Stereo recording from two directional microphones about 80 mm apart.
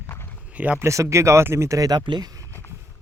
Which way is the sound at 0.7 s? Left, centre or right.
Right.